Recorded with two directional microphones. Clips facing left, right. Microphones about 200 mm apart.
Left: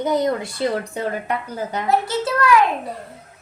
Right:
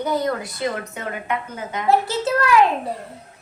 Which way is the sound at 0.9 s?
35° left (ahead or behind).